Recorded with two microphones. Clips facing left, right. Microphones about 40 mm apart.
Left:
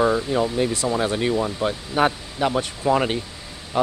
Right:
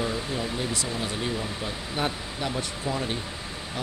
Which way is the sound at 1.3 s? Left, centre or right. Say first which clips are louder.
Left 9 dB; left.